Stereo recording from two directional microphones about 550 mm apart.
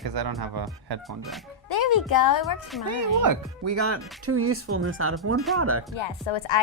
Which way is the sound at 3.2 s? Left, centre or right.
Right.